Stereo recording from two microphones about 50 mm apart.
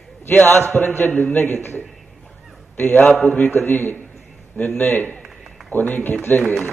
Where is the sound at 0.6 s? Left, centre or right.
Left.